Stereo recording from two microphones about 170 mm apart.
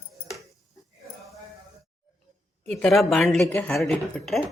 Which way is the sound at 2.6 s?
Centre (ahead or behind).